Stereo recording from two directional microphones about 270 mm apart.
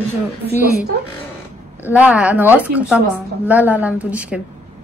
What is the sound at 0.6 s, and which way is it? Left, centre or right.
Speech, right.